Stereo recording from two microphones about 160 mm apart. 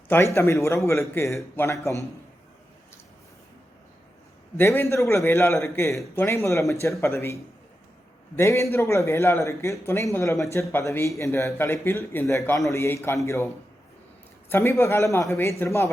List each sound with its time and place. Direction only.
0.1 s a man's voice: 15° left (ahead or behind)
4.5 s a man's voice: 15° left (ahead or behind)
8.4 s a man's voice: 20° left (ahead or behind)
14.5 s a man's voice: 15° left (ahead or behind)